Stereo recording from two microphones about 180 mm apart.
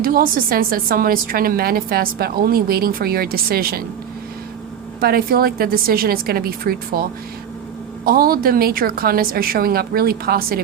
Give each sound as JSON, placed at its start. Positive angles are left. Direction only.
{"t": 0.0, "sound": "a woman's voice", "side_deg": -55}
{"t": 4.9, "sound": "a woman's voice", "side_deg": -55}
{"t": 8.0, "sound": "a woman's voice", "side_deg": -55}